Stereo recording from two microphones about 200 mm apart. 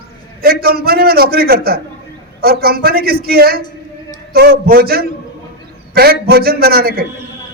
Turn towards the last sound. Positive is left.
turn(degrees=-50)  # may be behind; listen again after turning